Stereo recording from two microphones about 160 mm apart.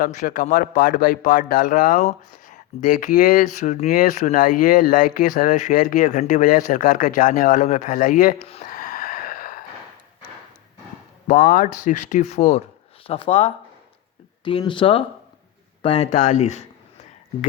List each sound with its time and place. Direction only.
0.0 s speech: 55° left (ahead or behind)
8.7 s a sound: 60° left (ahead or behind)
11.3 s speech: 55° left (ahead or behind)